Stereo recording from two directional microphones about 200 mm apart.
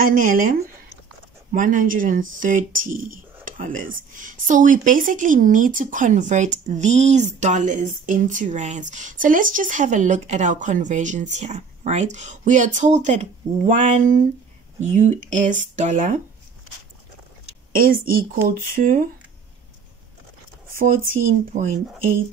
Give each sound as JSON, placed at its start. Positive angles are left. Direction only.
{"t": 0.0, "sound": "speech", "side_deg": -40}
{"t": 17.7, "sound": "speech", "side_deg": -45}
{"t": 20.7, "sound": "speech", "side_deg": -45}